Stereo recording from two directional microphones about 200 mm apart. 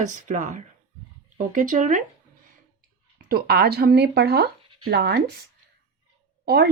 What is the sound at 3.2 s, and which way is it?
Speech, 50° right (ahead or behind).